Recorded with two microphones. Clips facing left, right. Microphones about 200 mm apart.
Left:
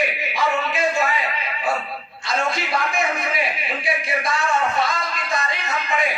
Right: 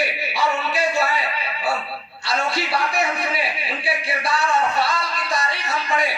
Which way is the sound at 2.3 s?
35° right (ahead or behind).